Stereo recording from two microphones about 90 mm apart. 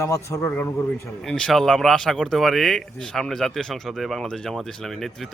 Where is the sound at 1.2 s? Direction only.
10° left (ahead or behind).